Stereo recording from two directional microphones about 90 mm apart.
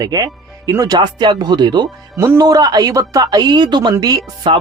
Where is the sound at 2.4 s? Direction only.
45° right (ahead or behind).